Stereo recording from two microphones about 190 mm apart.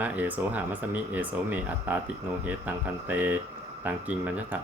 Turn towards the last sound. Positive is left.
turn(degrees=-10)  # may be behind; listen again after turning